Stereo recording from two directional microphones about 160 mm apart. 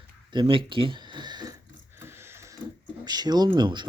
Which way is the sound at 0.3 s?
30° right (ahead or behind).